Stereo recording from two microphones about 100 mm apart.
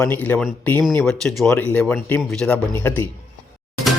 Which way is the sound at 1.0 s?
5° left (ahead or behind).